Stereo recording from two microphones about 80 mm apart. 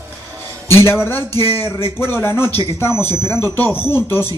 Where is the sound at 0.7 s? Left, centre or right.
Left.